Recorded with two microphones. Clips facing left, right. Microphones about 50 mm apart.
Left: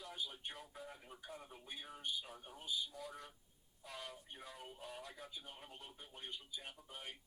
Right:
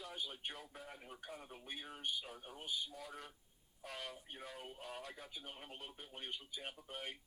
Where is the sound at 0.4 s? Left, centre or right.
Right.